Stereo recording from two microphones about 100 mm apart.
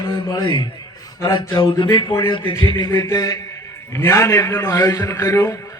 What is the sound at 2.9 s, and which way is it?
A man's voice, 30° left (ahead or behind).